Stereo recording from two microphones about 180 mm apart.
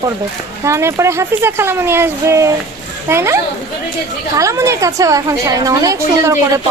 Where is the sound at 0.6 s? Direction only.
15° right (ahead or behind).